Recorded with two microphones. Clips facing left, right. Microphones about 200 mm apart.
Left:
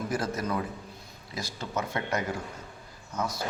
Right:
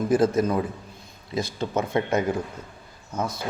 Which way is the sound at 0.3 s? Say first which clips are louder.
Right 8 dB; 25° right (ahead or behind).